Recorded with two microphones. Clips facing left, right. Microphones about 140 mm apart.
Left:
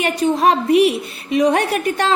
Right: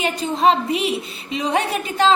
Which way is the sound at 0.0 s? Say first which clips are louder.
Left 2 dB; 60° left (ahead or behind).